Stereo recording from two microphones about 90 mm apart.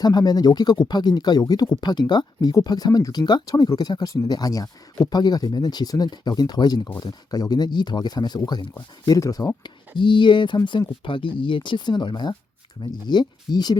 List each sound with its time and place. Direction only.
0.0 s speech: 50° left (ahead or behind)
9.0 s speech: 40° left (ahead or behind)
9.6 s speech: 65° left (ahead or behind)